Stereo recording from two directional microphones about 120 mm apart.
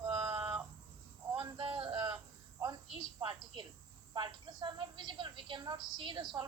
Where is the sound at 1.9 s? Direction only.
30° right (ahead or behind).